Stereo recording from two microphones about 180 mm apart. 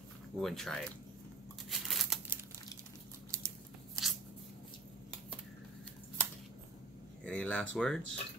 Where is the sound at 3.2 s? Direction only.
15° right (ahead or behind).